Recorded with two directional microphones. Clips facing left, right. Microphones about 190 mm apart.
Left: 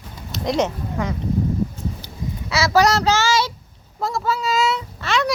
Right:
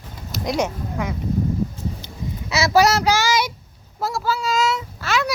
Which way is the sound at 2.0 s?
20° right (ahead or behind).